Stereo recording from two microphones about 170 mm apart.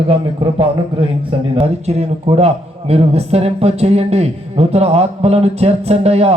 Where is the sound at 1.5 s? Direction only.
40° right (ahead or behind).